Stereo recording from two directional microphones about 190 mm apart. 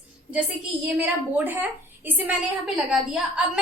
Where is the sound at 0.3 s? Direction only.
5° right (ahead or behind).